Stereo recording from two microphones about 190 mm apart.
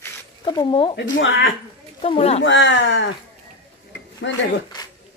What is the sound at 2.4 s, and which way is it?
Speech, 75° left (ahead or behind).